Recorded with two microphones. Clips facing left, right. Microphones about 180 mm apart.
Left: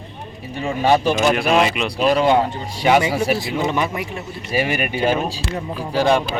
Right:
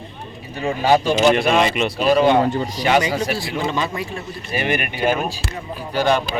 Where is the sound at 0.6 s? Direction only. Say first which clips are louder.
Even; centre (ahead or behind).